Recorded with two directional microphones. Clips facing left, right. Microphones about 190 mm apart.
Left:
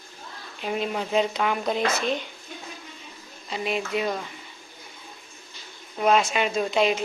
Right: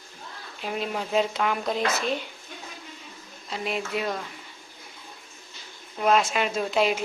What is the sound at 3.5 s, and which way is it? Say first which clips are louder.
Speech: left 2 dB; centre (ahead or behind).